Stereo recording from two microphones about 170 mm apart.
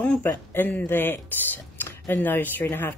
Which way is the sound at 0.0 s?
10° left (ahead or behind).